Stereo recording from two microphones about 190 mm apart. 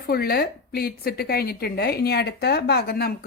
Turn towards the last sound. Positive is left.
turn(degrees=55)  # may be behind; listen again after turning